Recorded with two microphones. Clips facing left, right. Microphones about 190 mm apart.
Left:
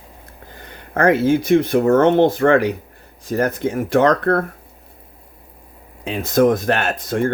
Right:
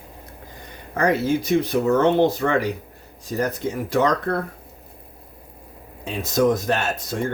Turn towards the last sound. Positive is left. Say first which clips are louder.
# left 5 dB
turn(degrees=55)  # may be behind; listen again after turning